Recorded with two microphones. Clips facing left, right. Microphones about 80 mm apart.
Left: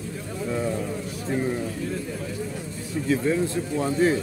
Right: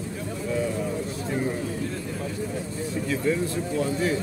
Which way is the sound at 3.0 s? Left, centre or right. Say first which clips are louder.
Left 3 dB; left.